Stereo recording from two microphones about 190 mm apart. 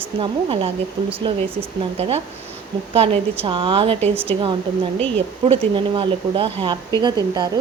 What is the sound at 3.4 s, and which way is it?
Speech, 25° right (ahead or behind).